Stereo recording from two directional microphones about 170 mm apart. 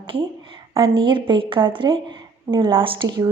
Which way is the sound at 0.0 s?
30° right (ahead or behind).